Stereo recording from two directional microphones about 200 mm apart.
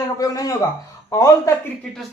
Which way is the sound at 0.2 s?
15° left (ahead or behind).